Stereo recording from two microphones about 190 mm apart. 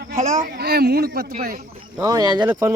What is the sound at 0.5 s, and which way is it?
Speech, 55° right (ahead or behind).